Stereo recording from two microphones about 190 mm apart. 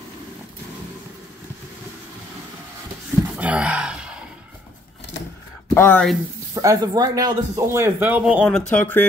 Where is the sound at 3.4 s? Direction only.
5° right (ahead or behind).